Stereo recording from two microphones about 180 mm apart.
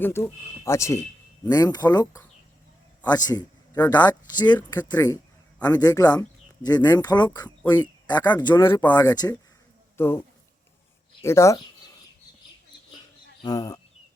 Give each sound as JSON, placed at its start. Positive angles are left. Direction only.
{"t": 0.0, "sound": "a man's voice", "side_deg": 15}
{"t": 4.1, "sound": "speech", "side_deg": 25}
{"t": 13.4, "sound": "speech", "side_deg": 20}